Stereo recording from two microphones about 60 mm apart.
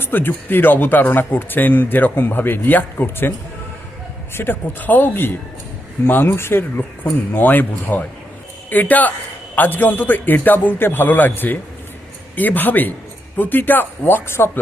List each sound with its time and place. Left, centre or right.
0.0 s speech: left
4.4 s a man's voice: left